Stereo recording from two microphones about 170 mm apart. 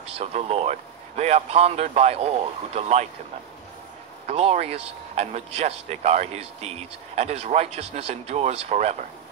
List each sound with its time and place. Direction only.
0.0 s speech: 40° right (ahead or behind)
4.3 s speech: 40° right (ahead or behind)